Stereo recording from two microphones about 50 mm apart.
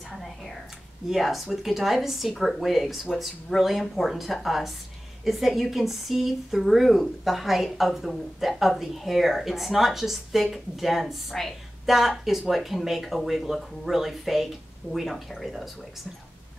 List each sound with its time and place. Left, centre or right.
1.1 s a woman's voice: centre